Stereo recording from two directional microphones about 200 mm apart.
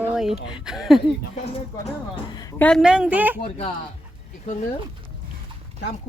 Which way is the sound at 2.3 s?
20° left (ahead or behind).